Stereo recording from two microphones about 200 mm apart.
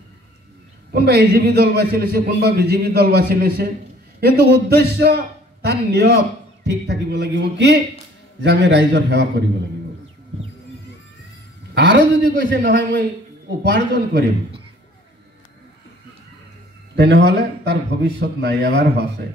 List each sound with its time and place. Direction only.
0.9 s a man's voice: 50° right (ahead or behind)
11.7 s a man's voice: 60° right (ahead or behind); by 12.8 s 45° right (ahead or behind)
13.6 s a man's voice: 60° right (ahead or behind)
16.9 s a man's voice: 60° right (ahead or behind)